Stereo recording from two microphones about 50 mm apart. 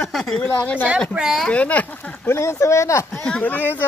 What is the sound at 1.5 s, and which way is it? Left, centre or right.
Speech, left.